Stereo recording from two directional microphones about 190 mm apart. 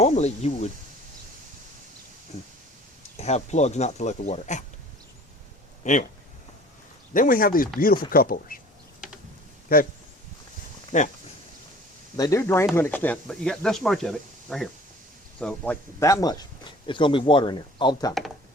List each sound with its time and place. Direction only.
0.0 s speech: 35° left (ahead or behind)
3.2 s speech: 35° left (ahead or behind)
5.8 s speech: 40° left (ahead or behind)
7.1 s speech: 45° left (ahead or behind)
9.7 s speech: 50° left (ahead or behind)
10.9 s speech: 40° left (ahead or behind)
12.1 s speech: 15° left (ahead or behind)